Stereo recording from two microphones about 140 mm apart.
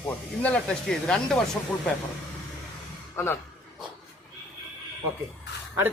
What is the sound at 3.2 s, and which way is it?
Speech, 20° left (ahead or behind).